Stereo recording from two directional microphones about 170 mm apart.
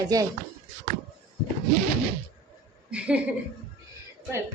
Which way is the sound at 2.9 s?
5° right (ahead or behind).